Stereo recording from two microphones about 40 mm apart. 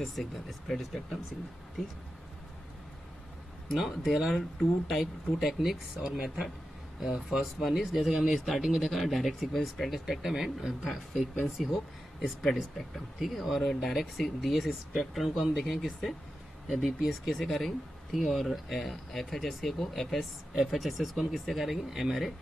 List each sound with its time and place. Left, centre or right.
0.0 s speech: centre
4.0 s speech: centre
6.0 s speech: centre
7.2 s speech: centre